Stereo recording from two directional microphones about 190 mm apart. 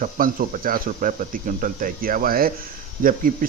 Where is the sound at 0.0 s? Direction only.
45° right (ahead or behind).